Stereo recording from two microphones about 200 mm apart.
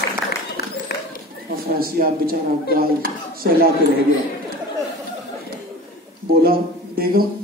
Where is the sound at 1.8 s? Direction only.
50° right (ahead or behind).